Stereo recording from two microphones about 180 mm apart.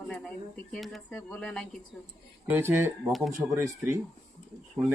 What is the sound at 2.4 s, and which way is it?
Speech, 10° right (ahead or behind).